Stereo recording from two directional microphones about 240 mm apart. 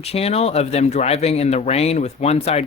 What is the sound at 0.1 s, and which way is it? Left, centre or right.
Speech, left.